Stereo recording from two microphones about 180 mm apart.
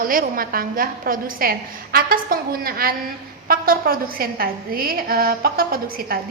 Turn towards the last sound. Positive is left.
turn(degrees=-55)  # may be behind; listen again after turning